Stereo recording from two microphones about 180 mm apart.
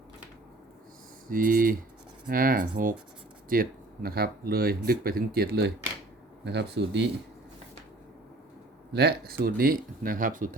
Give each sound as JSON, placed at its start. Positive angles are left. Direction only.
{"t": 1.3, "sound": "speech", "side_deg": -50}
{"t": 8.9, "sound": "speech", "side_deg": -60}